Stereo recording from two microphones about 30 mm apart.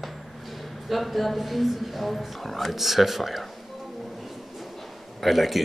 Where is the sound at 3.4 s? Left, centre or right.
Centre.